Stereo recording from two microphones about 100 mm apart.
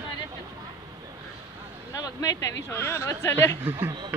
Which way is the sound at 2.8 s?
25° left (ahead or behind).